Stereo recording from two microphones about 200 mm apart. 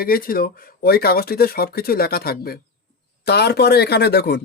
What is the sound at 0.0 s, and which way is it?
Speech, 45° left (ahead or behind).